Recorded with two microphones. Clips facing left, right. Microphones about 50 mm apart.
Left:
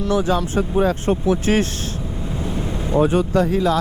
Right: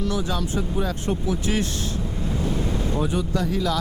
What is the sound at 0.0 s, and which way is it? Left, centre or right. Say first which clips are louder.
Speech: left 7 dB; left.